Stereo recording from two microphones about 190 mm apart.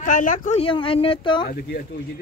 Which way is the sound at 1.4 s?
50° left (ahead or behind).